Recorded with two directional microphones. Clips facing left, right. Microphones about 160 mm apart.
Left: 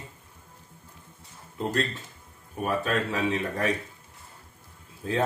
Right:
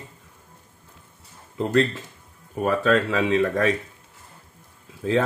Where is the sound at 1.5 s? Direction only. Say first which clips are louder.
Right 7 dB; 90° right.